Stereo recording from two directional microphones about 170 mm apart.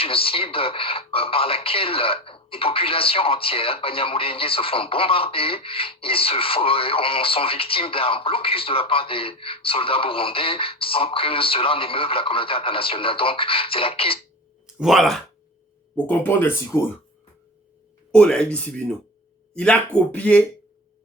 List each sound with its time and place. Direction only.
0.0 s speech: 35° left (ahead or behind)
14.8 s speech: centre (ahead or behind)
16.0 s speech: 10° left (ahead or behind)
18.1 s speech: 5° left (ahead or behind)